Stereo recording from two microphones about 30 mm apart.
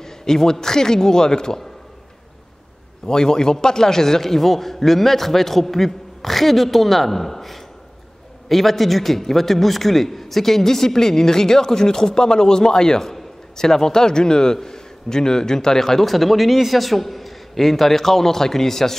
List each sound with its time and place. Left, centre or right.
0.0 s a man's voice: centre
3.1 s a man's voice: left